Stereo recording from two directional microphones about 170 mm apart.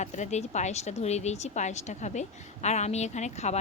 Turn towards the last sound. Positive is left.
turn(degrees=40)  # may be behind; listen again after turning